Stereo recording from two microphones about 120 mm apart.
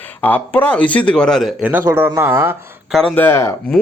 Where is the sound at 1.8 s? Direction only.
20° right (ahead or behind).